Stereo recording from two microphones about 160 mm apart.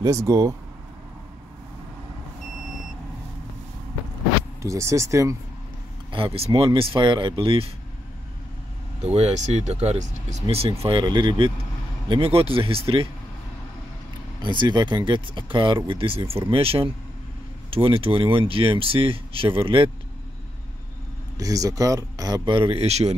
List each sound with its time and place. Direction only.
0.0 s speech: 20° right (ahead or behind)
4.6 s speech: 20° right (ahead or behind)
6.1 s speech: 35° right (ahead or behind)
9.0 s speech: 45° right (ahead or behind)
14.4 s speech: 30° right (ahead or behind)
21.4 s speech: 20° right (ahead or behind); by 23.1 s 40° right (ahead or behind)